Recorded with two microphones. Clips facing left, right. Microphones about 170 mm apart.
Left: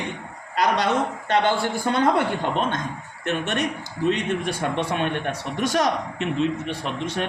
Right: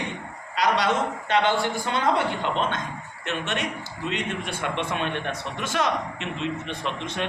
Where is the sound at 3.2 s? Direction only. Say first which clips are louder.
Left 4 dB; 40° left (ahead or behind).